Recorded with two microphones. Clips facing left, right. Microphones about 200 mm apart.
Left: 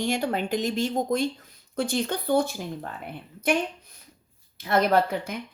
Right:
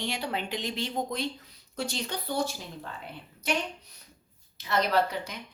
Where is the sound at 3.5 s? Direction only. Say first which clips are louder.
Left 6 dB; 55° left (ahead or behind).